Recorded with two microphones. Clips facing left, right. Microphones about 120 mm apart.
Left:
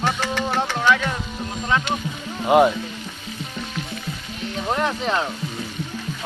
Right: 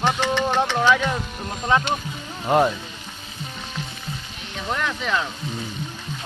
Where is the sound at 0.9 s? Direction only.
15° right (ahead or behind).